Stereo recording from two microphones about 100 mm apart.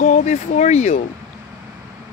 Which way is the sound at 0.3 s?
90° left.